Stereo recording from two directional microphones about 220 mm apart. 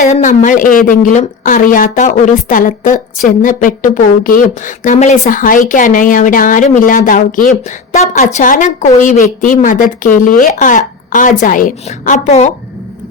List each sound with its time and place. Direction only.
0.0 s a woman's voice: 35° left (ahead or behind)